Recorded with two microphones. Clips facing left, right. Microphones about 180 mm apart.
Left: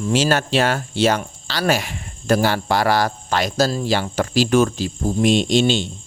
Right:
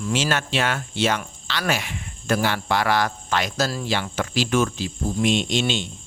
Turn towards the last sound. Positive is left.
turn(degrees=35)  # may be behind; listen again after turning